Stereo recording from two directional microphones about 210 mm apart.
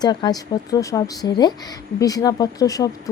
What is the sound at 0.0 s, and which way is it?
Speech, 20° left (ahead or behind).